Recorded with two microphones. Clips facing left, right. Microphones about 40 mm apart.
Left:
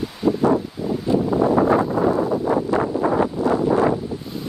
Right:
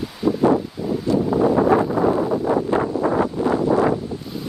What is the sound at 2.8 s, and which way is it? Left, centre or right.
Wind, centre.